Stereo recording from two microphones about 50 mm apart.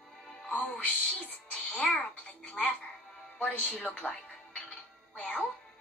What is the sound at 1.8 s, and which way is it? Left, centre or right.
Speech, centre.